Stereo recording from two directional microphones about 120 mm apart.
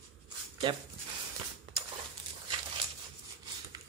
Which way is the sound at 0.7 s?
40° right (ahead or behind).